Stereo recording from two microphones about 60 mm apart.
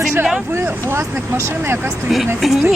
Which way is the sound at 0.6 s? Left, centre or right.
Right.